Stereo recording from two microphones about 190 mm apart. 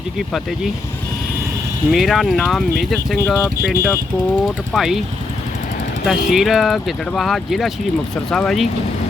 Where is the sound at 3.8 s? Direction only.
15° left (ahead or behind).